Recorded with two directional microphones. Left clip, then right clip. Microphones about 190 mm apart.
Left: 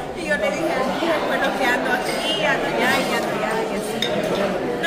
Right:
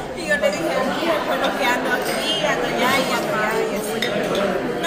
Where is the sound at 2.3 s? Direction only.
Centre (ahead or behind).